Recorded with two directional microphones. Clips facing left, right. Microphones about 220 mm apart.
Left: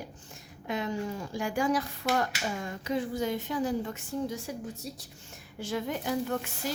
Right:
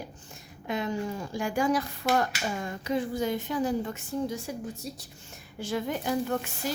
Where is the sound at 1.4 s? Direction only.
45° right (ahead or behind).